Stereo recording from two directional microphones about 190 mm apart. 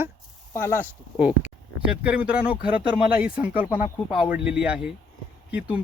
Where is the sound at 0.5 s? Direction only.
10° left (ahead or behind).